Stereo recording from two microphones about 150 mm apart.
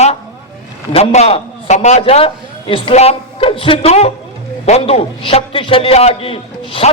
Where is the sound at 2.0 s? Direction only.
40° left (ahead or behind).